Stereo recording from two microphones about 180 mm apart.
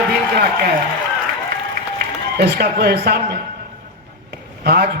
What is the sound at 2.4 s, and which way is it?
Speech, 60° right (ahead or behind).